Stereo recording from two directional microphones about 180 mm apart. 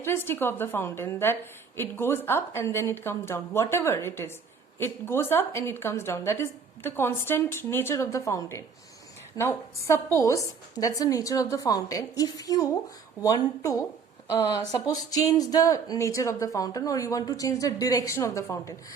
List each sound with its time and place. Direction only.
0.0 s a woman's voice: 15° left (ahead or behind)